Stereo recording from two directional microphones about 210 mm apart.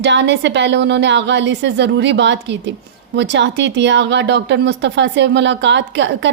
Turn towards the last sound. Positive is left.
turn(degrees=-60)  # may be behind; listen again after turning